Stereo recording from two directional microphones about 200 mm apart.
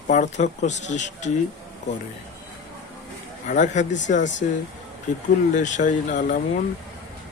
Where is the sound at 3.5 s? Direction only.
40° left (ahead or behind).